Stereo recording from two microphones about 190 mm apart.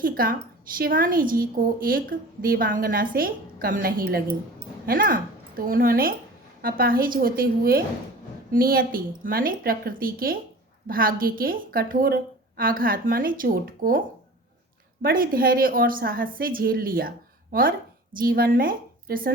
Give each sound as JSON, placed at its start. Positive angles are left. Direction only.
{"t": 0.0, "sound": "a woman's voice", "side_deg": -50}
{"t": 15.0, "sound": "a woman's voice", "side_deg": -50}